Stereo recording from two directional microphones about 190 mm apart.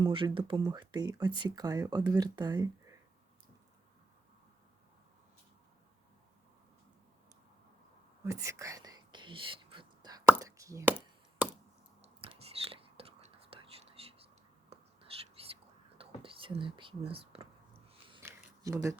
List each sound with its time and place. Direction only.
0.0 s speech: 25° right (ahead or behind)
8.2 s whispering: 15° right (ahead or behind)
10.2 s a sound: 15° right (ahead or behind)
12.2 s biting: 30° right (ahead or behind)
12.6 s whispering: 30° right (ahead or behind)
18.2 s a sound: 15° right (ahead or behind)